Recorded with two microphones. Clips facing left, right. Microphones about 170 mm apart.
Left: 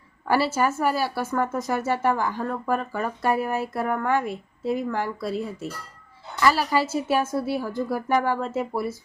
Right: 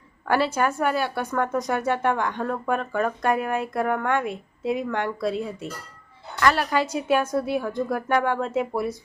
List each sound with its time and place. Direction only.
0.3 s speech: 5° left (ahead or behind)